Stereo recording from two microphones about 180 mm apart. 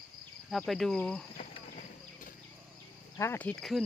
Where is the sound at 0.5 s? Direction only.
Centre (ahead or behind).